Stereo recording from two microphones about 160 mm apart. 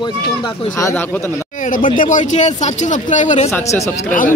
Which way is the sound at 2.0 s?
50° left (ahead or behind).